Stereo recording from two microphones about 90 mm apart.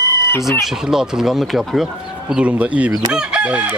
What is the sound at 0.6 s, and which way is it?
Speech, 5° right (ahead or behind).